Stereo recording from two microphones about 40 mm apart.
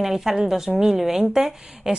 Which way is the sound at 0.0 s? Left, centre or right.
Centre.